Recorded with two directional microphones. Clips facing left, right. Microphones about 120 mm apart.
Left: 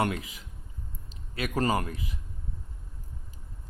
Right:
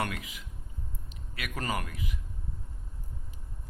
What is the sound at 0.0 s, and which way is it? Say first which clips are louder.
A man's voice: left 5 dB; 30° left (ahead or behind).